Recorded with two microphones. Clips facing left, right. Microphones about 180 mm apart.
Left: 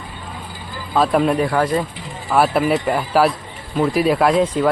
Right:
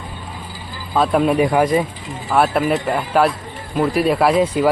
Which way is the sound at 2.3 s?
Centre (ahead or behind).